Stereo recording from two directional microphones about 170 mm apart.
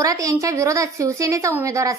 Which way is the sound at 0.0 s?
20° right (ahead or behind).